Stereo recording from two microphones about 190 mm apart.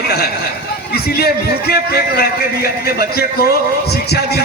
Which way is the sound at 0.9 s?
55° left (ahead or behind).